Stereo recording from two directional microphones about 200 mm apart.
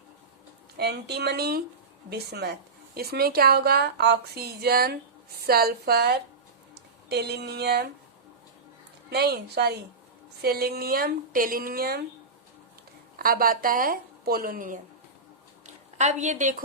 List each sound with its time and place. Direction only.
0.8 s a woman's voice: 55° right (ahead or behind)
9.0 s a woman's voice: 55° right (ahead or behind)
13.1 s a woman's voice: 45° right (ahead or behind)